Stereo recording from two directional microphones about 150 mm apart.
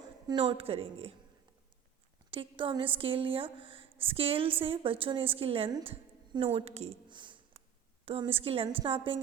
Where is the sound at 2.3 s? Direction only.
35° right (ahead or behind).